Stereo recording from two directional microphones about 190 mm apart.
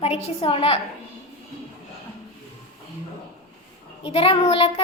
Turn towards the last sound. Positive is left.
turn(degrees=30)  # may be behind; listen again after turning